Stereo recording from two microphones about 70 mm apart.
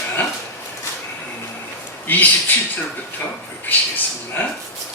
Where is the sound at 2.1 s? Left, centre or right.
Left.